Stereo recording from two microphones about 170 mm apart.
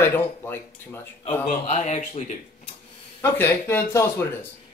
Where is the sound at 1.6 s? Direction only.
40° left (ahead or behind).